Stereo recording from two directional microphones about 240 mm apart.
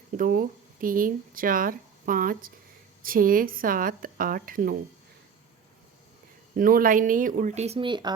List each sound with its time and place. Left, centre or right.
0.2 s speech: right
6.6 s speech: right; by 8.1 s centre